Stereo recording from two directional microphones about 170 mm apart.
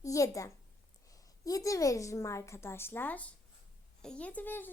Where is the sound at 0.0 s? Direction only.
20° left (ahead or behind).